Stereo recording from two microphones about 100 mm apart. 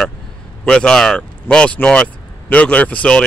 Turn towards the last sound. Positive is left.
turn(degrees=10)  # may be behind; listen again after turning